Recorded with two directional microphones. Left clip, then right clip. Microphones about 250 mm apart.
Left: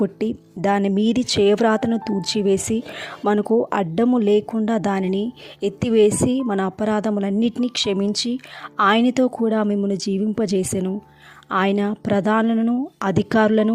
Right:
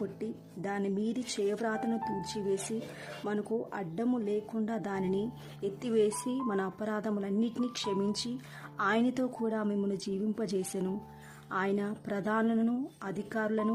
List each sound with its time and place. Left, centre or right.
0.0 s a woman's voice: left